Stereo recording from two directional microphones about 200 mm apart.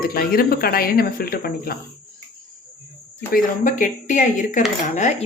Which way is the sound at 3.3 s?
40° left (ahead or behind).